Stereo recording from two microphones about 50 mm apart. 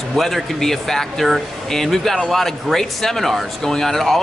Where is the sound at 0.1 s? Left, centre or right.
Centre.